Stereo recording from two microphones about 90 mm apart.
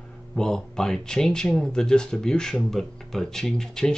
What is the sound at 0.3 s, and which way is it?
Speech, 5° left (ahead or behind).